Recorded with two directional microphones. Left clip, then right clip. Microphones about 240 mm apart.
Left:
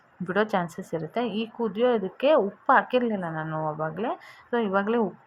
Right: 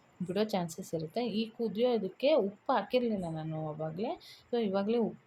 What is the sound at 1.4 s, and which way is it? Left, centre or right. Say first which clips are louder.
Speech: left 6 dB; left.